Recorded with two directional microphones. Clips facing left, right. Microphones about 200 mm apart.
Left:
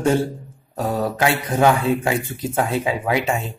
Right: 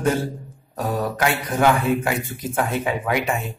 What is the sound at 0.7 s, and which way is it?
Speech, 25° left (ahead or behind).